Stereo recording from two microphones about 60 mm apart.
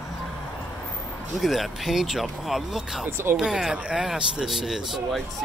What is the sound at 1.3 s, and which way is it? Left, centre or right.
Speech, centre.